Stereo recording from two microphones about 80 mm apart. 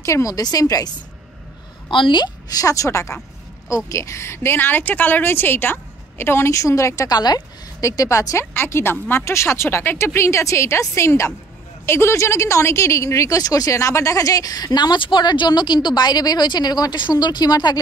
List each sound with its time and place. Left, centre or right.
0.0 s speech: left
1.9 s a woman's voice: left
7.1 s a woman's voice: left